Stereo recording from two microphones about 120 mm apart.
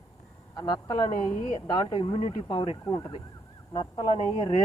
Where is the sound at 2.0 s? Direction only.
50° left (ahead or behind).